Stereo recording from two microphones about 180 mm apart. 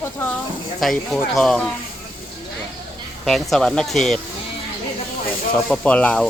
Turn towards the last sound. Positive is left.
turn(degrees=5)  # may be behind; listen again after turning